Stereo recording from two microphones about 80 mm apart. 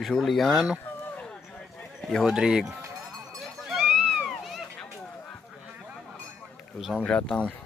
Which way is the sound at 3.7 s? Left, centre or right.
Centre.